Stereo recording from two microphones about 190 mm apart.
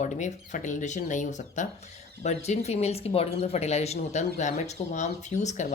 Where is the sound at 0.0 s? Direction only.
40° left (ahead or behind).